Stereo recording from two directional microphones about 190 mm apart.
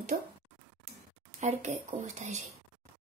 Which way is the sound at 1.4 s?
40° right (ahead or behind).